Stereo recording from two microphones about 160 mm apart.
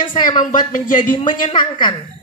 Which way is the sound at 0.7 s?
55° left (ahead or behind).